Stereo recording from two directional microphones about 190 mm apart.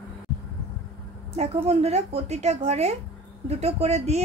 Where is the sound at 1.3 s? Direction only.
35° right (ahead or behind).